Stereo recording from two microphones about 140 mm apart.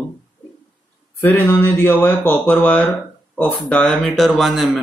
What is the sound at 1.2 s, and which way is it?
Speech, 15° left (ahead or behind).